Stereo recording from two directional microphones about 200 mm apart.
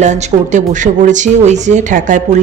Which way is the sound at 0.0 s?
35° right (ahead or behind).